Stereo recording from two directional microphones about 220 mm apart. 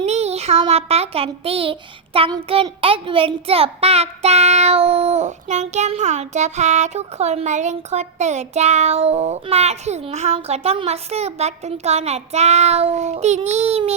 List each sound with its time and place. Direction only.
0.0 s a child's voice: 30° right (ahead or behind)